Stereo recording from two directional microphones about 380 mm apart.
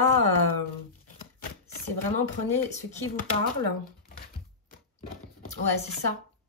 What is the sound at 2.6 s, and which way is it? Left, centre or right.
Speech, centre.